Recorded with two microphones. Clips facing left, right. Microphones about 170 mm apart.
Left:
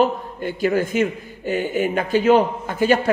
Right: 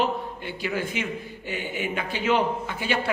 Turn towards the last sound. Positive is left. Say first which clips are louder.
# left 9 dB
turn(degrees=45)  # may be behind; listen again after turning